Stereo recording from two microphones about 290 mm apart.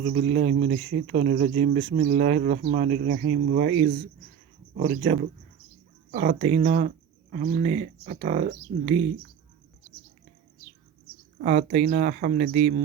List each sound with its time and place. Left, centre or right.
0.0 s speech: right
11.3 s speech: right